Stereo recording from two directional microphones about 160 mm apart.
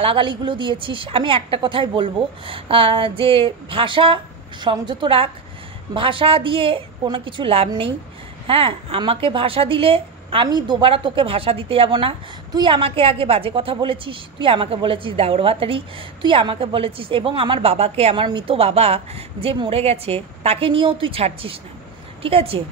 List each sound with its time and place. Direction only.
0.0 s speech: 30° right (ahead or behind)